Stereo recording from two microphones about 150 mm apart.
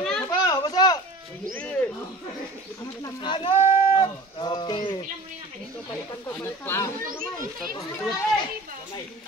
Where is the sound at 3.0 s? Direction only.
30° left (ahead or behind).